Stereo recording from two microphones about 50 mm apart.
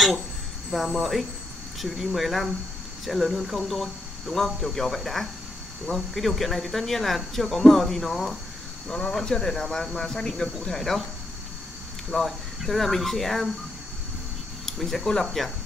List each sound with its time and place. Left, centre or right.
0.7 s speech: centre
8.8 s speech: centre
12.1 s speech: centre
14.7 s speech: centre